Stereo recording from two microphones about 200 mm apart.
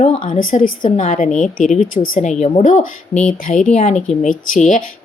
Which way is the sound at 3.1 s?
5° left (ahead or behind).